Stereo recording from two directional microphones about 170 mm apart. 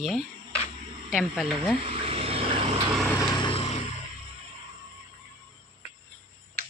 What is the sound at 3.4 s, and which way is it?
Vehicle, 30° left (ahead or behind).